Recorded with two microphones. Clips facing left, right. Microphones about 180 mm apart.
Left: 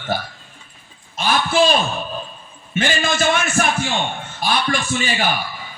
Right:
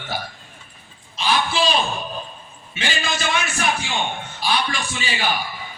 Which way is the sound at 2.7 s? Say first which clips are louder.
Left 6 dB; 50° left (ahead or behind).